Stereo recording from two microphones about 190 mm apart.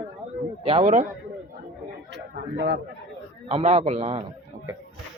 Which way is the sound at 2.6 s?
70° right (ahead or behind).